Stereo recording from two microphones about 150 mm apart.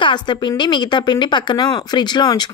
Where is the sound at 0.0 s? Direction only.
30° left (ahead or behind).